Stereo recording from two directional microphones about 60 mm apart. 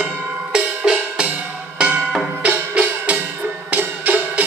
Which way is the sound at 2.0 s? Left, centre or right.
Centre.